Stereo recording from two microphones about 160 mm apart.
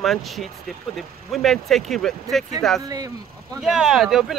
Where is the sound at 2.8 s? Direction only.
25° right (ahead or behind).